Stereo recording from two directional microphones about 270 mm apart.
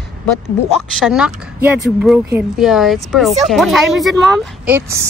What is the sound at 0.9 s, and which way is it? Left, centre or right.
Speech, centre.